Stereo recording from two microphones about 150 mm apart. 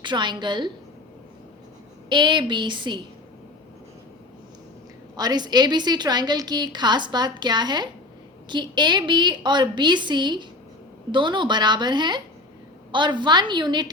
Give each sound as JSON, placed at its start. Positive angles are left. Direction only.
{"t": 0.0, "sound": "a woman's voice", "side_deg": -30}
{"t": 2.0, "sound": "a woman's voice", "side_deg": -30}
{"t": 5.1, "sound": "a woman's voice", "side_deg": -25}